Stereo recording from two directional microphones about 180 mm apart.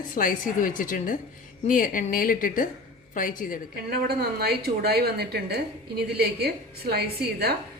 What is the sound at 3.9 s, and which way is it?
A woman's voice, 60° right (ahead or behind).